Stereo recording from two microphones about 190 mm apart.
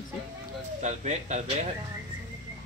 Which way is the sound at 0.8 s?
35° right (ahead or behind).